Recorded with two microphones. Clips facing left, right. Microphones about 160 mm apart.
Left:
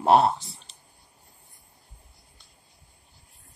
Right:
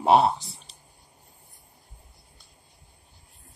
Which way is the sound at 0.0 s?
Centre (ahead or behind).